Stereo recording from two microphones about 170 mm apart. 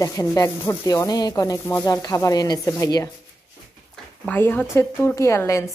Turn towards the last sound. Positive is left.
turn(degrees=15)  # may be behind; listen again after turning